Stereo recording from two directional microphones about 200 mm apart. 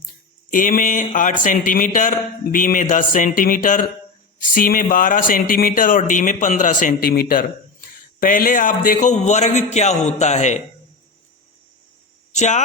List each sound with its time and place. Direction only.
0.5 s speech: 40° left (ahead or behind)
12.3 s speech: 35° left (ahead or behind)